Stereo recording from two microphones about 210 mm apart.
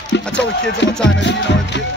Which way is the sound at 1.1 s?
55° left (ahead or behind).